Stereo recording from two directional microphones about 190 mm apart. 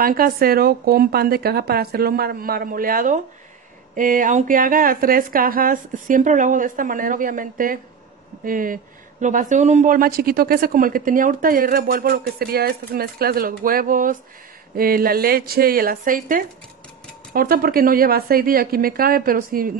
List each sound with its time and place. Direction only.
0.0 s speech: 50° right (ahead or behind)